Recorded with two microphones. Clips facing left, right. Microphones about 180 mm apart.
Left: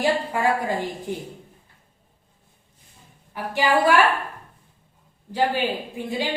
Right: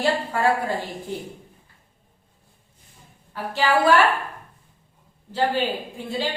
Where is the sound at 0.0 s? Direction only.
15° left (ahead or behind).